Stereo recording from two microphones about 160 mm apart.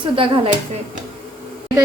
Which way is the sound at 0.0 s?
30° right (ahead or behind).